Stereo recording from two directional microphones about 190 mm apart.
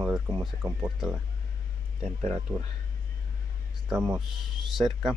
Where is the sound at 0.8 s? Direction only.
5° right (ahead or behind).